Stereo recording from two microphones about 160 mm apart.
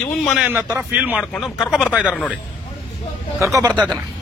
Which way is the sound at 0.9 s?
10° right (ahead or behind).